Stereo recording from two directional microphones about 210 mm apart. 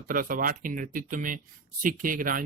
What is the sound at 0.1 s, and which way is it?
Speech, 40° right (ahead or behind).